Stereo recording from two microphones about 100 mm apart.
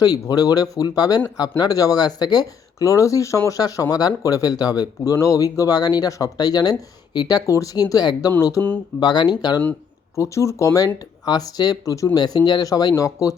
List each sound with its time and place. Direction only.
0.0 s speech: 40° left (ahead or behind)
9.0 s speech: 45° left (ahead or behind)
10.2 s speech: 30° left (ahead or behind)